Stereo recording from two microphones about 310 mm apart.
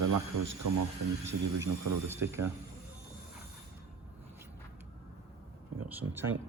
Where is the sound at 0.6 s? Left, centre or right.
Right.